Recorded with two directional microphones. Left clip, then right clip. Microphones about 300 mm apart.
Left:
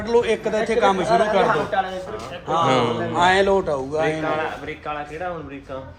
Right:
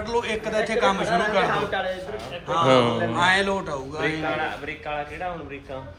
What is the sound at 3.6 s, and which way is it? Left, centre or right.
A man's voice, left.